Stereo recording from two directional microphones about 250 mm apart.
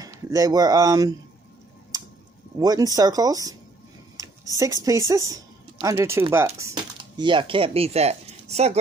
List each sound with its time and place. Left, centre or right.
0.0 s speech: centre
2.6 s speech: centre
4.2 s a sound: centre
4.8 s speech: centre